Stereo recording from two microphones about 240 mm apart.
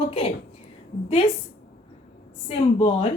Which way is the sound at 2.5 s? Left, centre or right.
Left.